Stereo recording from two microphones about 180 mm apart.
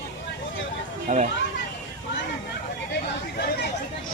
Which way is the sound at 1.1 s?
35° right (ahead or behind).